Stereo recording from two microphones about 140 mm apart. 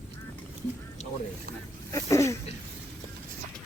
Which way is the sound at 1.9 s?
20° left (ahead or behind).